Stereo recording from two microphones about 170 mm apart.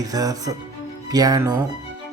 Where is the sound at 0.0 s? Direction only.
20° right (ahead or behind).